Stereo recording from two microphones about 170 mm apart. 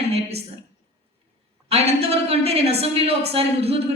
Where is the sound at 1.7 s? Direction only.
35° right (ahead or behind).